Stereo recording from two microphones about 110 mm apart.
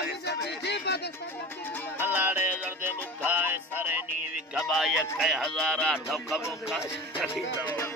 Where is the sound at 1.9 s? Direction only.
20° right (ahead or behind).